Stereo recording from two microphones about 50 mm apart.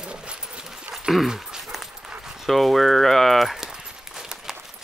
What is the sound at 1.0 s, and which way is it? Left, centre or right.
Dog, centre.